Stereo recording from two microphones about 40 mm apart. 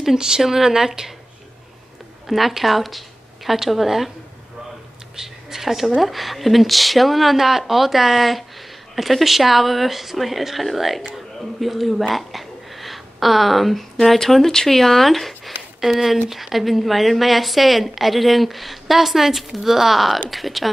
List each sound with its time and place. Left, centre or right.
0.0 s speech: centre
2.2 s a woman's voice: centre
5.1 s a woman's voice: centre